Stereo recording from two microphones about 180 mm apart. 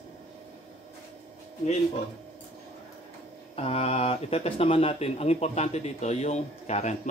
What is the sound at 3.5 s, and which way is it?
Speech, 35° left (ahead or behind).